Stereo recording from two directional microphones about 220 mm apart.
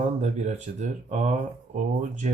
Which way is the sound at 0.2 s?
30° right (ahead or behind).